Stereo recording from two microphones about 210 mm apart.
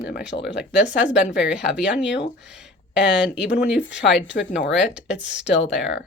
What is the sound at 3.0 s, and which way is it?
Speech, 55° left (ahead or behind).